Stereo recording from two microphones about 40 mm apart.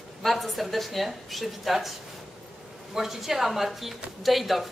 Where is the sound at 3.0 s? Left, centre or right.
Centre.